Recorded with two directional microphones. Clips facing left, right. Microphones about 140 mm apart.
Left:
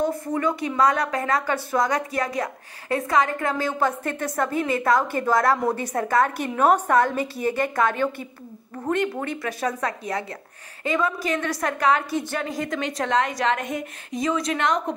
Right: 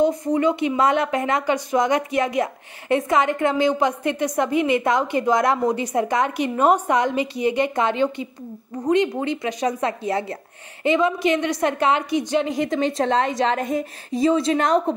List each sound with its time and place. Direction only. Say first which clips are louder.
0.0 s a woman's voice: right 5 dB; 20° right (ahead or behind)